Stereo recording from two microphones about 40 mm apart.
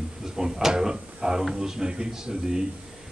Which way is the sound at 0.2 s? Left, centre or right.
Centre.